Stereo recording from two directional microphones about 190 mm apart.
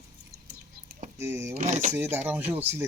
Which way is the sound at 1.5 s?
40° right (ahead or behind).